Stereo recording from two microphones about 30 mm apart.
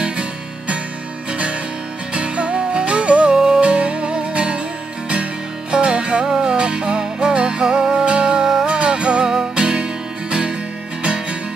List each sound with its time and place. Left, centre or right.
0.0 s music: right
2.1 s music: right
3.3 s music: centre
3.6 s music: right
5.7 s music: right
6.2 s music: centre
6.5 s music: right
8.6 s music: right